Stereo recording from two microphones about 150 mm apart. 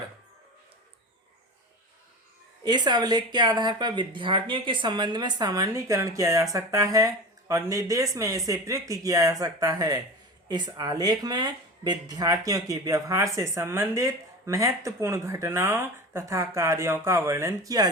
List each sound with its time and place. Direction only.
2.6 s speech: 30° right (ahead or behind)